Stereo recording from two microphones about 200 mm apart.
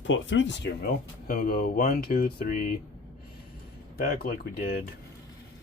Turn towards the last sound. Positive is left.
turn(degrees=50)  # may be behind; listen again after turning